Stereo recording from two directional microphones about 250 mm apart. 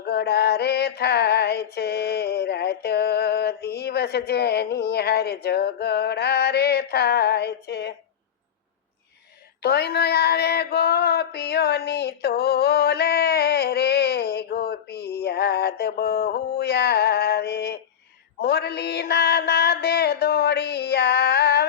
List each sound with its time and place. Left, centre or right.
0.0 s mantra: left
9.6 s a sound: left
18.3 s mantra: left